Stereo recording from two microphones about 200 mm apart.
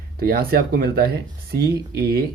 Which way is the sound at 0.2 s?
50° right (ahead or behind).